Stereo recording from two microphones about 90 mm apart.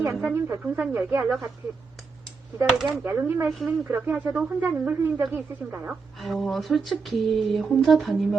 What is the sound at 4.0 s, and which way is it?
Speech, 20° right (ahead or behind).